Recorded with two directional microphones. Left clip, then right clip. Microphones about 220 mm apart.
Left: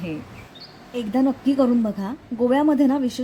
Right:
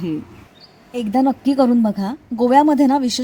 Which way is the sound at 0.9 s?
30° right (ahead or behind).